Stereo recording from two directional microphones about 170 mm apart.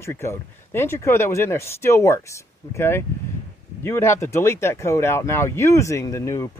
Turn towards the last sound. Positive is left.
turn(degrees=15)  # may be behind; listen again after turning